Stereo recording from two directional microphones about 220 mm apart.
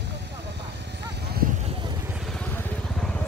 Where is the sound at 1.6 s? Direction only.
25° right (ahead or behind).